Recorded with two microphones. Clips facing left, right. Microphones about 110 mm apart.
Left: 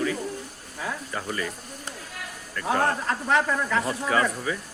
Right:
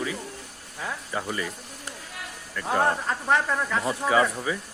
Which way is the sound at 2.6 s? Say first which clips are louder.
Even; 5° right (ahead or behind).